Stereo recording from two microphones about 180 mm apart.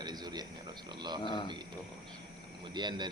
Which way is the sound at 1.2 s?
25° left (ahead or behind).